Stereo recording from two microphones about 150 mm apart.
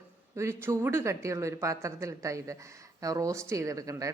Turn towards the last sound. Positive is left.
turn(degrees=-20)  # may be behind; listen again after turning